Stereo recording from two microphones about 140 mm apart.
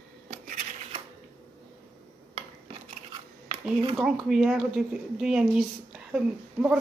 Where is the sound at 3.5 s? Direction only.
35° right (ahead or behind).